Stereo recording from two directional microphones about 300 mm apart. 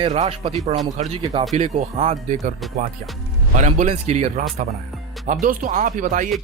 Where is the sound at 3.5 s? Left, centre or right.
Right.